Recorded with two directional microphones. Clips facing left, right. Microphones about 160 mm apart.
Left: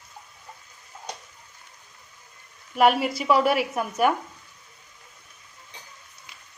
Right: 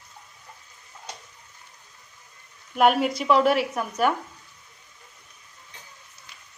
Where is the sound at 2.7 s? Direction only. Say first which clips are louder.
Even; centre (ahead or behind).